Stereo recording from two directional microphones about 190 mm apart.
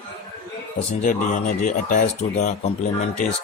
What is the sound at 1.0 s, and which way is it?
Speech, 40° left (ahead or behind).